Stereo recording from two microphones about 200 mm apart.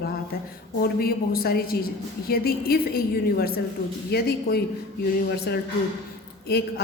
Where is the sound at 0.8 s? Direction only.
50° left (ahead or behind).